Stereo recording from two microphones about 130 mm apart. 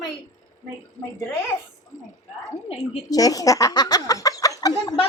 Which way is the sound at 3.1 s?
30° left (ahead or behind).